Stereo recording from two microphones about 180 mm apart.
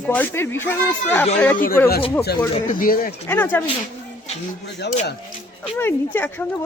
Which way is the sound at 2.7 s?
50° left (ahead or behind).